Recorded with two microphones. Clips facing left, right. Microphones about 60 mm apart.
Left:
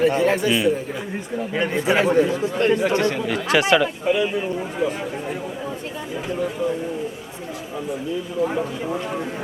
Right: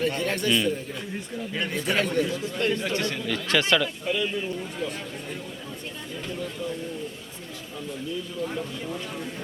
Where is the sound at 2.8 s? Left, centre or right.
Left.